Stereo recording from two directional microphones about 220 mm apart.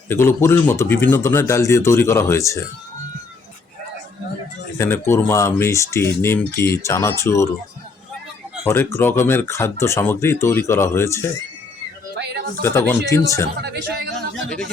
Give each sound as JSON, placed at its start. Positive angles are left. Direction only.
{"t": 0.1, "sound": "speech", "side_deg": 10}
{"t": 4.8, "sound": "speech", "side_deg": 10}
{"t": 8.6, "sound": "speech", "side_deg": 10}
{"t": 12.1, "sound": "a sound", "side_deg": -50}
{"t": 12.6, "sound": "speech", "side_deg": 10}
{"t": 13.6, "sound": "speech", "side_deg": -50}